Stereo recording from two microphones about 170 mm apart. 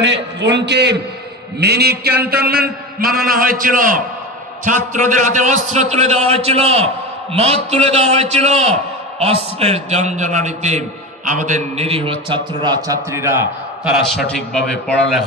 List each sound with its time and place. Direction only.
0.0 s a man's voice: 90° right
1.6 s a man's voice: 70° right (ahead or behind); by 13.4 s 15° right (ahead or behind)
14.5 s a man's voice: 5° left (ahead or behind)